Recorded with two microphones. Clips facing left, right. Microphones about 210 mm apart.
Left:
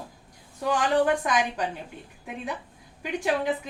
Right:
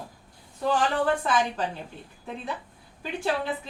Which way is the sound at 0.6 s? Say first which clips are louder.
Left 2 dB; 15° left (ahead or behind).